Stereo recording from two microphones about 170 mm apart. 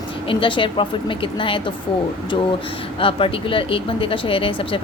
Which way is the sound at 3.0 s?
30° left (ahead or behind).